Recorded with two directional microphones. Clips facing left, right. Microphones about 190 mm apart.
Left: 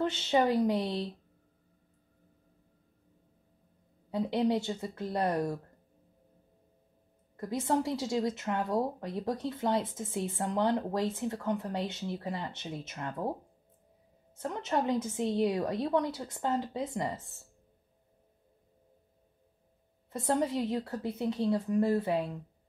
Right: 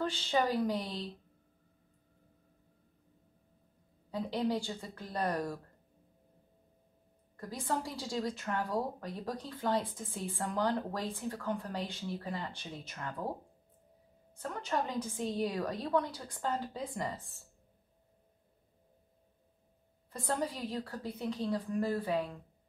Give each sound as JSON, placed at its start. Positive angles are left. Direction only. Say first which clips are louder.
{"t": 0.0, "sound": "a woman's voice", "louder": "left 4 dB", "side_deg": 20}
{"t": 4.1, "sound": "a woman's voice", "louder": "left 5 dB", "side_deg": 20}
{"t": 7.3, "sound": "a woman's voice", "louder": "left 6 dB", "side_deg": 25}
{"t": 14.3, "sound": "a woman's voice", "louder": "left 4 dB", "side_deg": 25}
{"t": 20.1, "sound": "a woman's voice", "louder": "left 6 dB", "side_deg": 25}